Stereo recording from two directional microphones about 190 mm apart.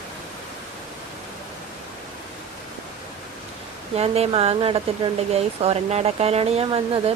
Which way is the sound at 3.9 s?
35° right (ahead or behind).